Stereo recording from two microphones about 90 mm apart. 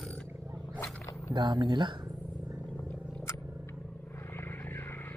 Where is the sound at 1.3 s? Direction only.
55° right (ahead or behind).